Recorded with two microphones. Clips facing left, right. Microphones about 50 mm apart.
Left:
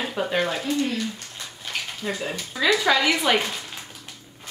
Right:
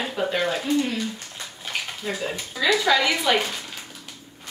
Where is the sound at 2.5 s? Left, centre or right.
Centre.